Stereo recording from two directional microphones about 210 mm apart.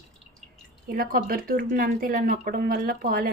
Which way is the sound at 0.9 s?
45° right (ahead or behind).